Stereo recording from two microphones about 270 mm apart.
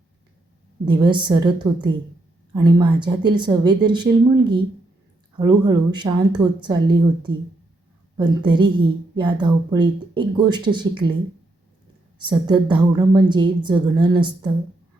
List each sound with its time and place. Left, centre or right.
0.9 s a woman's voice: centre
12.2 s a woman's voice: centre